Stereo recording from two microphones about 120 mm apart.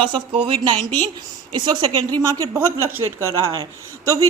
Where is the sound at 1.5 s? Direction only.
40° right (ahead or behind).